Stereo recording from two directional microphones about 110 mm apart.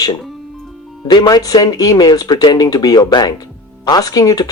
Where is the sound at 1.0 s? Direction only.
40° left (ahead or behind).